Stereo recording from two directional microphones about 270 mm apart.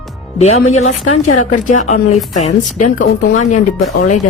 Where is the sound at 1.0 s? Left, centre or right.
Left.